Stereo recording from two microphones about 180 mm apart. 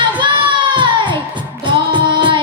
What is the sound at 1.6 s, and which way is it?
Music, 25° right (ahead or behind).